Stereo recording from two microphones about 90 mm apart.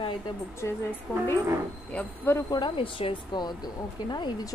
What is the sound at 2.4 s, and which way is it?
Speech, 60° left (ahead or behind).